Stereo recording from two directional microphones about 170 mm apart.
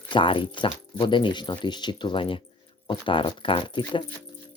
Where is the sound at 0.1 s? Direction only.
30° left (ahead or behind).